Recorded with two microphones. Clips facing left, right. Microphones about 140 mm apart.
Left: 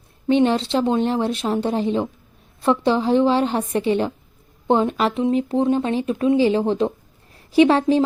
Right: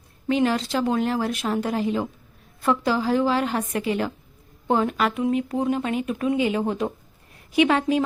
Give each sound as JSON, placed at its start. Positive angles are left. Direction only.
{"t": 0.3, "sound": "a woman's voice", "side_deg": 30}